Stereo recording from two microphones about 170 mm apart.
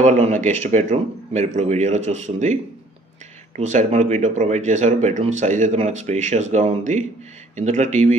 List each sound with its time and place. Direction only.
0.0 s speech: 40° right (ahead or behind)